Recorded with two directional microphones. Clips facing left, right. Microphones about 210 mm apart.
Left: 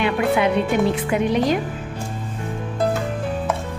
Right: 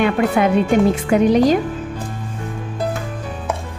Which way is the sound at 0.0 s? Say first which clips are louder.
Right 3 dB; 45° right (ahead or behind).